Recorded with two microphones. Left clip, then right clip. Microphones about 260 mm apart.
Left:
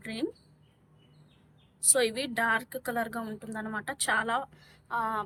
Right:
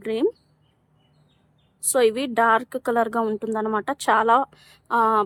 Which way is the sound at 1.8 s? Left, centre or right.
Centre.